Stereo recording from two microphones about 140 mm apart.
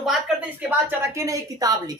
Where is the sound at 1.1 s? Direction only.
20° right (ahead or behind).